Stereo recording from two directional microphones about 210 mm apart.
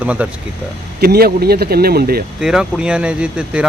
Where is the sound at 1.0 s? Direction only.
45° right (ahead or behind).